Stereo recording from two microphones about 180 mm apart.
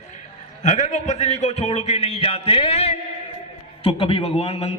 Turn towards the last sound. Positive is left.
turn(degrees=35)  # may be behind; listen again after turning